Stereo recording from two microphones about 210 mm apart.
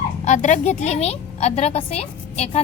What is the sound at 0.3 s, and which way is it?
A woman's voice, 35° left (ahead or behind).